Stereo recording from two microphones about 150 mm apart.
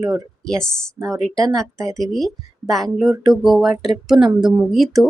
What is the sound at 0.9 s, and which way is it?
Speech, 20° right (ahead or behind).